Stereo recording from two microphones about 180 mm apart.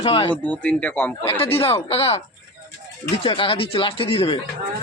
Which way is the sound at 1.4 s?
35° left (ahead or behind).